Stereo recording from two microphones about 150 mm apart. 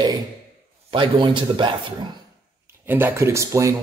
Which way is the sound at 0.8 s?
35° right (ahead or behind).